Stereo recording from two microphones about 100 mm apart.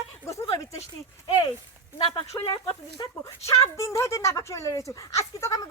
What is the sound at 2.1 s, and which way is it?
Speech, 60° left (ahead or behind).